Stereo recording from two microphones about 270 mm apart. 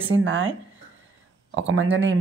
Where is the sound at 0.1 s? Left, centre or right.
Right.